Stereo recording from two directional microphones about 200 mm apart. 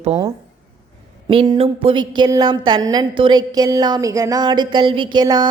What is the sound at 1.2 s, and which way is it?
A woman's voice, 25° right (ahead or behind).